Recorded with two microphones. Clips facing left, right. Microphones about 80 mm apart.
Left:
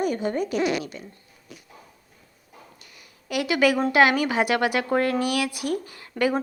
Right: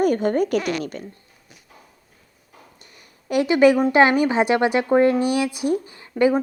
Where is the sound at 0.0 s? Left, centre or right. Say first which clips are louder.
Right 6 dB; right.